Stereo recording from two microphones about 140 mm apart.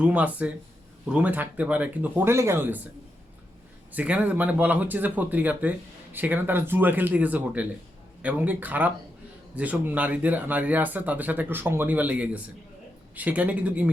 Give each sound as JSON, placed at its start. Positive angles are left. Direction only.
{"t": 0.0, "sound": "speech", "side_deg": -10}
{"t": 3.9, "sound": "speech", "side_deg": -10}